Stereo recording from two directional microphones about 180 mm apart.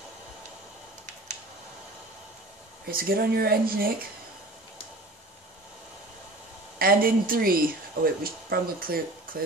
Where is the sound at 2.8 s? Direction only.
55° right (ahead or behind).